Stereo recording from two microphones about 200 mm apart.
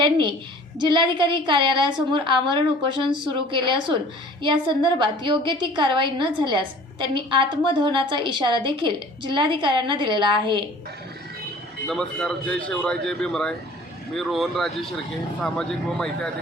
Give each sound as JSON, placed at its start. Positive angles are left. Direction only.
{"t": 0.0, "sound": "a woman's voice", "side_deg": -25}
{"t": 11.9, "sound": "speech", "side_deg": 5}